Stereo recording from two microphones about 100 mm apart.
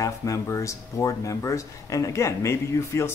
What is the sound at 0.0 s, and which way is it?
Speech, 35° left (ahead or behind).